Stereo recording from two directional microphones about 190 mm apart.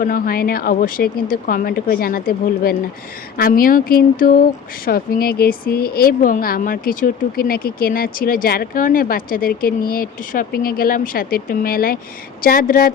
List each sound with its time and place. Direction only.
0.0 s speech: 50° left (ahead or behind)